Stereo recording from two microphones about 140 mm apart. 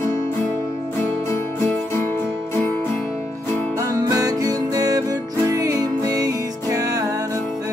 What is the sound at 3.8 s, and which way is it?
Music, 25° right (ahead or behind).